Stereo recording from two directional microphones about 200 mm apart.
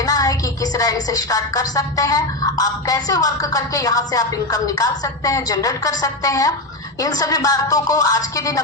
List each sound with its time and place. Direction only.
0.0 s speech: 15° left (ahead or behind)